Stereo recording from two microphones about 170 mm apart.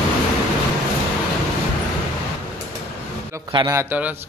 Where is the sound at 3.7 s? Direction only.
10° right (ahead or behind).